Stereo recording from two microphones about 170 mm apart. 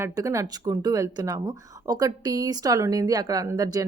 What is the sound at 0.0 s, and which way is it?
A woman's voice, 20° right (ahead or behind).